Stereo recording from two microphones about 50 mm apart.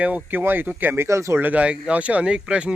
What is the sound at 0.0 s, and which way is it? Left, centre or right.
Speech, right.